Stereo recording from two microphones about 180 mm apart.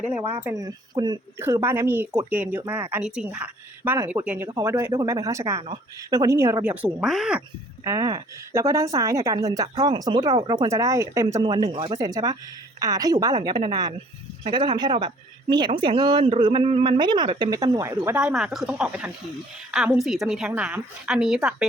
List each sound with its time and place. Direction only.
0.0 s speech: 10° right (ahead or behind)
7.9 s a woman's voice: 20° right (ahead or behind)